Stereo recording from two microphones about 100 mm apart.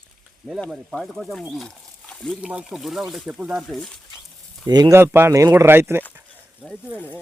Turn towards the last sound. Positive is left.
turn(degrees=15)  # may be behind; listen again after turning